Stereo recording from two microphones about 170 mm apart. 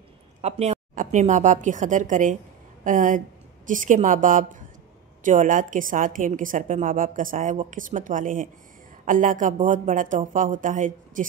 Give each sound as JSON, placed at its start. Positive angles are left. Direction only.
{"t": 0.4, "sound": "a woman's voice", "side_deg": -40}